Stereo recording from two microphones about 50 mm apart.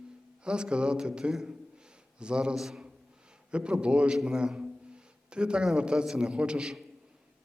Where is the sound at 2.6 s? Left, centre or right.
Centre.